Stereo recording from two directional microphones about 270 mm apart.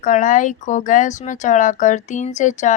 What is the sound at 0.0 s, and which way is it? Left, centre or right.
Speech, left.